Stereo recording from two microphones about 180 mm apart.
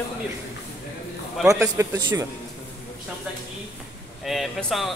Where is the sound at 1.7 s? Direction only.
15° right (ahead or behind).